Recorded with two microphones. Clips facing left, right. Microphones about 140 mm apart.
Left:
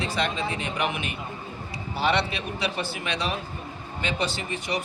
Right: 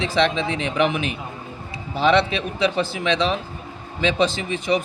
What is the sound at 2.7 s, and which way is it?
A man's voice, 90° right.